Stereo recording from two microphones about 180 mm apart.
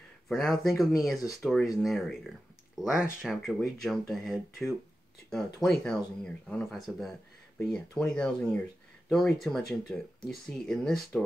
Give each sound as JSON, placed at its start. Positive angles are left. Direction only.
{"t": 0.3, "sound": "speech", "side_deg": 0}